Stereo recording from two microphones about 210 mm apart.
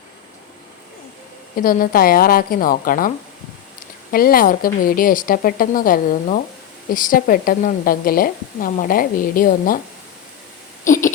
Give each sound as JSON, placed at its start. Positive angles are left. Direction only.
{"t": 1.5, "sound": "speech", "side_deg": 45}
{"t": 4.1, "sound": "a woman's voice", "side_deg": 45}
{"t": 10.8, "sound": "a sound", "side_deg": 40}